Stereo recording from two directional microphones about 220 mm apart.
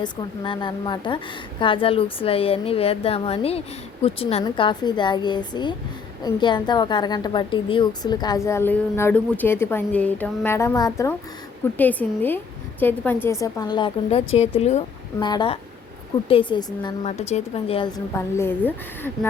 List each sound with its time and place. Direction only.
0.0 s a woman's voice: 20° left (ahead or behind)
17.0 s a woman's voice: 30° left (ahead or behind); by 19.3 s 10° left (ahead or behind)